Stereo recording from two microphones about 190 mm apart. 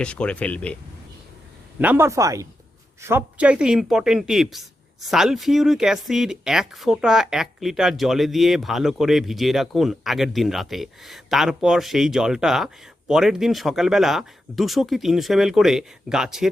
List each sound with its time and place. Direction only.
0.0 s speech: 5° left (ahead or behind)
1.8 s speech: 10° right (ahead or behind)